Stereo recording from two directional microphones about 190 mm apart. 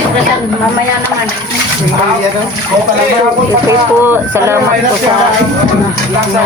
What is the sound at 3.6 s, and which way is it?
Speech, 10° right (ahead or behind).